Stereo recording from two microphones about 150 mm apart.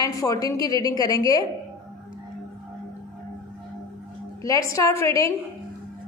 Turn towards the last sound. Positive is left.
turn(degrees=20)  # may be behind; listen again after turning